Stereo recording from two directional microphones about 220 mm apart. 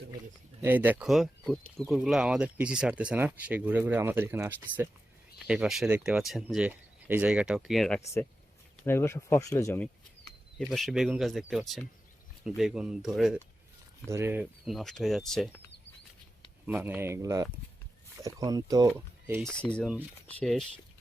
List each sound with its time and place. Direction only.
0.6 s speech: 10° right (ahead or behind)
14.6 s speech: centre (ahead or behind)
16.6 s speech: 5° right (ahead or behind)
19.4 s speech: 5° left (ahead or behind)